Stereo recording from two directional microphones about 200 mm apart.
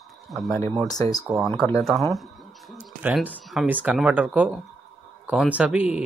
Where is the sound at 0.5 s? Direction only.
15° left (ahead or behind).